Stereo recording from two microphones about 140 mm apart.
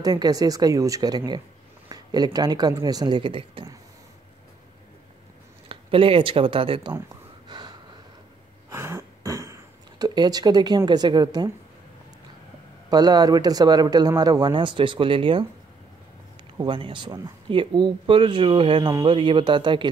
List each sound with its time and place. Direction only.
0.0 s speech: 25° right (ahead or behind)
5.7 s speech: 40° right (ahead or behind)
7.4 s snort: 30° right (ahead or behind)
8.6 s a sound: 20° right (ahead or behind)
10.9 s speech: 30° right (ahead or behind)
12.9 s speech: 30° right (ahead or behind)
16.5 s speech: 35° right (ahead or behind)